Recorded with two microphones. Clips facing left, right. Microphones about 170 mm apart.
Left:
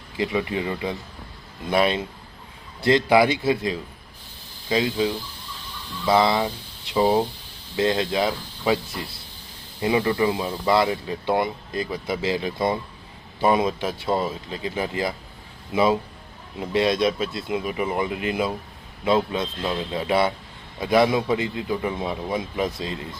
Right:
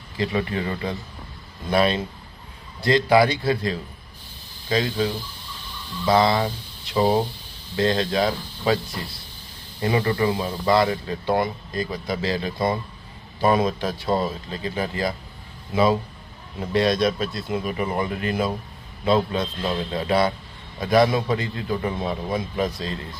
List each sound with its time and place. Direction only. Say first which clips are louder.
0.2 s speech: even; 15° left (ahead or behind)
6.1 s speech: even; 20° left (ahead or behind)
9.8 s speech: left 1 dB; 15° left (ahead or behind)